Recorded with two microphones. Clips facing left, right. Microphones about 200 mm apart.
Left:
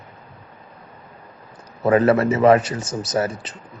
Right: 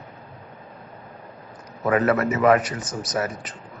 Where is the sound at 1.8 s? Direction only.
30° left (ahead or behind).